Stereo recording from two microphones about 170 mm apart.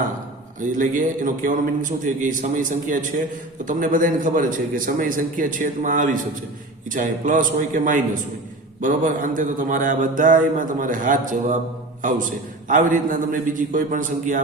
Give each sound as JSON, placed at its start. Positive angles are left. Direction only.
{"t": 0.6, "sound": "a man's voice", "side_deg": -50}